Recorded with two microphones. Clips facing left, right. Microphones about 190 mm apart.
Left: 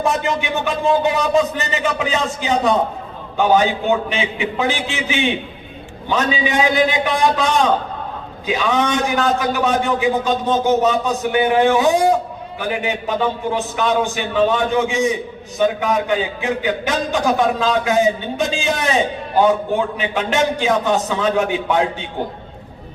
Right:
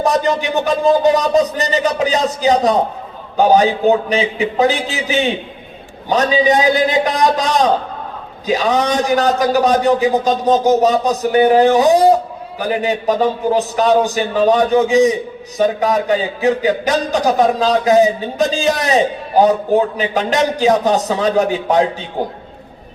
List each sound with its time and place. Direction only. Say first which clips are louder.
0.0 s a man's voice: right 4 dB; 35° right (ahead or behind)